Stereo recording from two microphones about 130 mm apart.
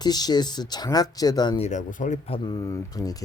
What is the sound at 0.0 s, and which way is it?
Speech, 30° left (ahead or behind).